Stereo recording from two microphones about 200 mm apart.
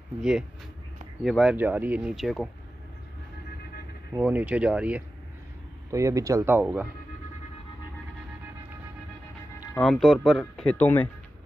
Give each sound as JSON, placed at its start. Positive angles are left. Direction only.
{"t": 0.2, "sound": "speech", "side_deg": -5}
{"t": 4.1, "sound": "speech", "side_deg": -10}
{"t": 9.8, "sound": "speech", "side_deg": 0}